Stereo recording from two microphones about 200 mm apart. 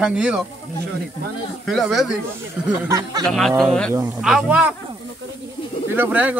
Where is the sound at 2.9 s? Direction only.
20° right (ahead or behind).